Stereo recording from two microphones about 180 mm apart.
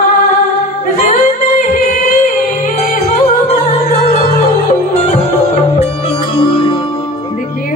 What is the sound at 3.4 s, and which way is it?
Music, 35° left (ahead or behind).